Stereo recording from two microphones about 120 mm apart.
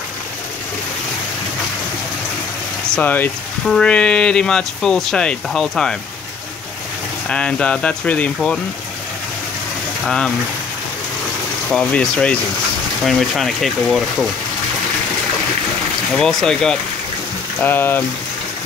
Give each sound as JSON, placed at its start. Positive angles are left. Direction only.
{"t": 2.9, "sound": "speech", "side_deg": 15}
{"t": 7.2, "sound": "speech", "side_deg": 10}
{"t": 10.0, "sound": "speech", "side_deg": 5}
{"t": 11.7, "sound": "speech", "side_deg": 10}
{"t": 16.1, "sound": "speech", "side_deg": 5}
{"t": 17.6, "sound": "speech", "side_deg": 15}